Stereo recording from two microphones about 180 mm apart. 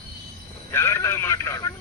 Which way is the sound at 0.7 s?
15° left (ahead or behind).